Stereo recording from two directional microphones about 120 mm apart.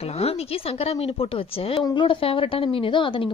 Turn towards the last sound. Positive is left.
turn(degrees=45)  # may be behind; listen again after turning